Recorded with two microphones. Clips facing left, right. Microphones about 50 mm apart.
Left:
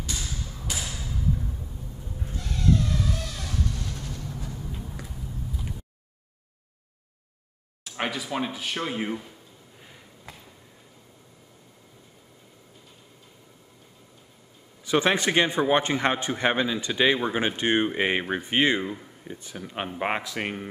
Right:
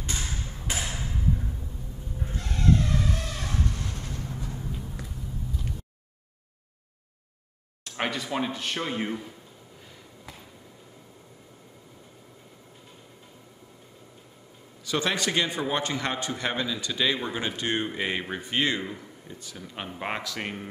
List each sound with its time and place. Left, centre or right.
0.0 s thump: right
2.2 s vehicle: right
4.6 s a sound: centre
7.8 s speech: centre
14.9 s a man's voice: left